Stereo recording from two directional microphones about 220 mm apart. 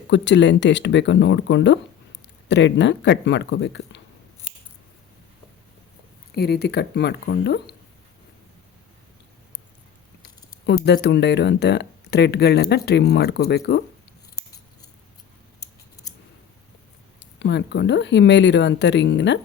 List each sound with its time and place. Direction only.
0.1 s speech: 55° left (ahead or behind)
6.3 s speech: 45° left (ahead or behind)
10.8 s speech: 50° left (ahead or behind)
17.4 s speech: 50° left (ahead or behind)